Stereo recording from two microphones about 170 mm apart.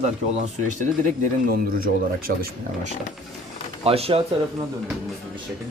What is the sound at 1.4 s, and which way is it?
Speech, 55° right (ahead or behind).